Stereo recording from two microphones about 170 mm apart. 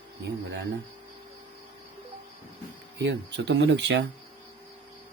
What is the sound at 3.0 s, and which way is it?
Speech, 90° right.